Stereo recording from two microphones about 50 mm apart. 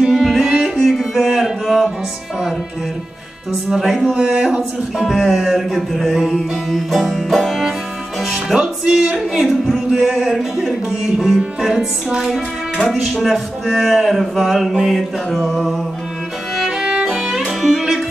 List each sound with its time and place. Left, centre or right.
0.1 s music: centre
3.7 s music: centre
4.1 s music: right
4.4 s music: centre
8.3 s speech: centre
9.5 s music: centre
16.5 s music: centre